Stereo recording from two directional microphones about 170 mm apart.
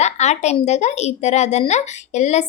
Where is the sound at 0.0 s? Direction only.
40° left (ahead or behind).